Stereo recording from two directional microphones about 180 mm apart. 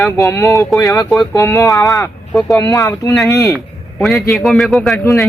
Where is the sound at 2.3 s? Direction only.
Centre (ahead or behind).